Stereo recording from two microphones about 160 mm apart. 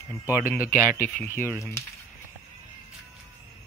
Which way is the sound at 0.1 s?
15° left (ahead or behind).